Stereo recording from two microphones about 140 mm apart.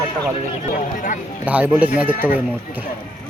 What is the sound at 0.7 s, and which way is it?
Speech, 70° left (ahead or behind).